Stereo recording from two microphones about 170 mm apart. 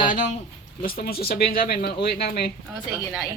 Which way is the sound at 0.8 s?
60° left (ahead or behind).